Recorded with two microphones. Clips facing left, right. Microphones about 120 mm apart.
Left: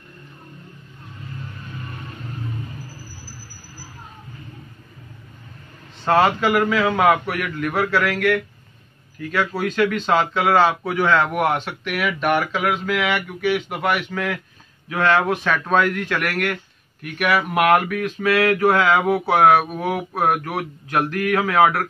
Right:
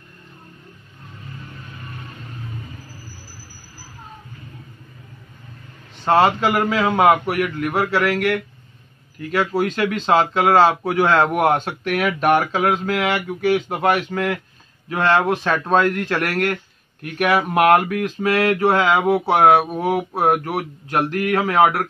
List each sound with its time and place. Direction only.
6.0 s a man's voice: 25° right (ahead or behind)
9.9 s a man's voice: 30° right (ahead or behind)
14.9 s a man's voice: 25° right (ahead or behind)
19.2 s a man's voice: 25° right (ahead or behind)